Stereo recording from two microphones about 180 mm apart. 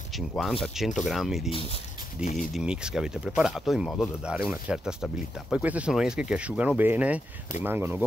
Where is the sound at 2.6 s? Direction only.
5° right (ahead or behind).